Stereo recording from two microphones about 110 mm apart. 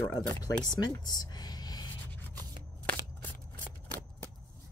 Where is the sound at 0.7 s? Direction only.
35° left (ahead or behind).